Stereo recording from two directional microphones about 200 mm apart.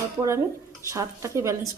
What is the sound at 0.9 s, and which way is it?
Speech, 15° right (ahead or behind).